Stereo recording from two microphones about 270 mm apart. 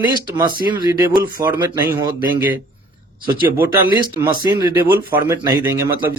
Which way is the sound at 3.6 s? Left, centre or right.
Centre.